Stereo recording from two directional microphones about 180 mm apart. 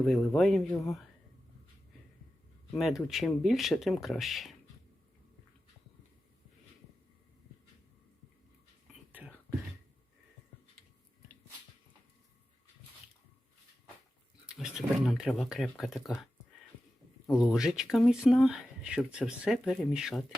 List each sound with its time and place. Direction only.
0.0 s speech: centre (ahead or behind)
2.7 s speech: centre (ahead or behind)
14.4 s speech: 5° right (ahead or behind)
17.3 s speech: 5° right (ahead or behind)